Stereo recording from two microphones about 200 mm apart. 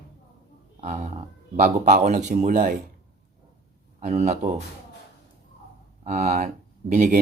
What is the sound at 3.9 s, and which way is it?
Speech, 35° right (ahead or behind).